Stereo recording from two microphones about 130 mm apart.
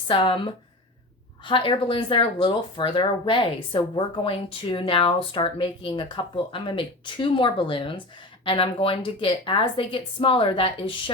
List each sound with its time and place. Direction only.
0.1 s a woman's voice: 40° left (ahead or behind)